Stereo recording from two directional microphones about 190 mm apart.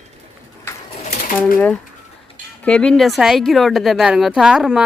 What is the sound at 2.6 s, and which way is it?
Speech, 5° left (ahead or behind).